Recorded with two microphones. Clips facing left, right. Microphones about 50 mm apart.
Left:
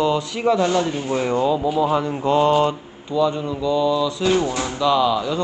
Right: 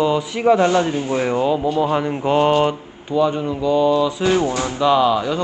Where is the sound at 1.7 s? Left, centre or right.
Centre.